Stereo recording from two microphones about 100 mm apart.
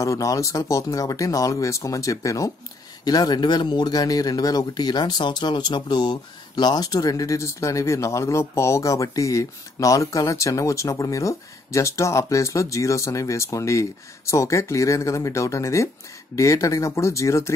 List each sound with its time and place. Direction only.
0.0 s speech: 35° left (ahead or behind)